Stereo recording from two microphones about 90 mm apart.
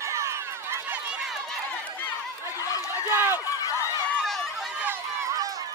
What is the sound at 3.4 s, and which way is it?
Run, 40° left (ahead or behind).